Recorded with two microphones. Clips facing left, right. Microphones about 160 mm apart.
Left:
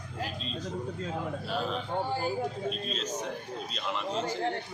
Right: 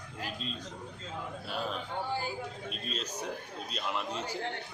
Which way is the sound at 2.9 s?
10° right (ahead or behind).